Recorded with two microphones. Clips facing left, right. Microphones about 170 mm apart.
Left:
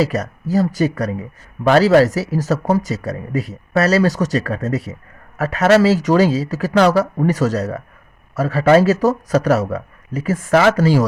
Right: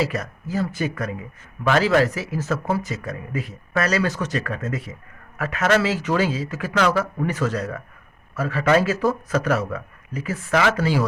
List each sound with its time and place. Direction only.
0.0 s speech: 40° left (ahead or behind)